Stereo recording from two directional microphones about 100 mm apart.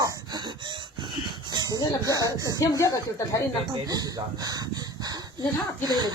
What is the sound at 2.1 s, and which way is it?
Speech, 35° right (ahead or behind).